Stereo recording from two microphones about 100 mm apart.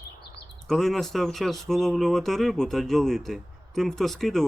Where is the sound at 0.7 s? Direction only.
Centre (ahead or behind).